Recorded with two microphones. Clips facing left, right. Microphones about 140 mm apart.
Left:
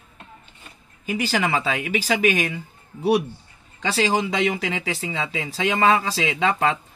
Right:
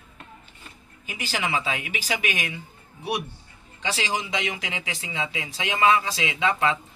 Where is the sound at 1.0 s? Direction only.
40° left (ahead or behind).